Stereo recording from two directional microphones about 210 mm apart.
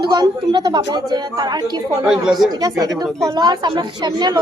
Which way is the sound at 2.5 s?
15° right (ahead or behind).